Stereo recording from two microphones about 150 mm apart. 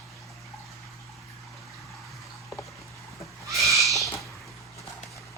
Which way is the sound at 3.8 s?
Centre (ahead or behind).